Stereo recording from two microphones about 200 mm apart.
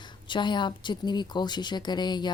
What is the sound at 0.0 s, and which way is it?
A woman's voice, 25° left (ahead or behind).